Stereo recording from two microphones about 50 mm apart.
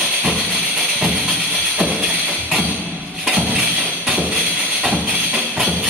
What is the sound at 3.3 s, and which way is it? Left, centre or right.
Music, right.